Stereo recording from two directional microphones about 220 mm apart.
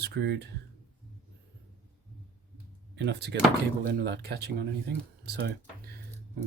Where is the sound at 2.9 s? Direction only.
50° right (ahead or behind).